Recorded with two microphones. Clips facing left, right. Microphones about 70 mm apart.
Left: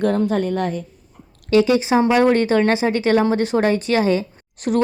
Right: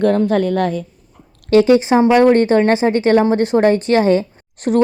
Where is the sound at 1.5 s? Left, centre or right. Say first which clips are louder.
Right 4 dB; right.